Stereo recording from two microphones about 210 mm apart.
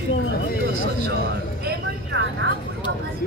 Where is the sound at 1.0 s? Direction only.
45° right (ahead or behind).